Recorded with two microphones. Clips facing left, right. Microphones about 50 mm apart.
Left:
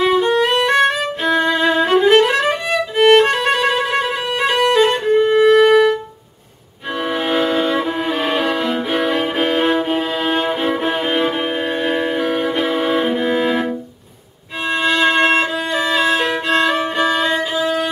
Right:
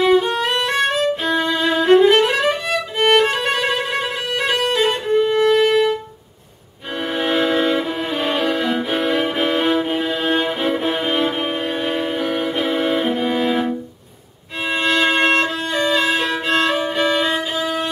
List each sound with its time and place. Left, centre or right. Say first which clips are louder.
0.0 s violin: left 1 dB; centre
5.6 s music: left 4 dB; centre
7.1 s violin: even; centre
14.7 s violin: left 2 dB; centre